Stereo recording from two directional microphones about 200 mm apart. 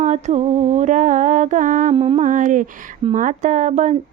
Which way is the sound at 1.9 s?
30° right (ahead or behind).